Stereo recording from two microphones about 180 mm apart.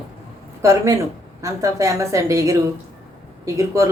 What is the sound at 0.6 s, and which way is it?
A woman's voice, 15° right (ahead or behind).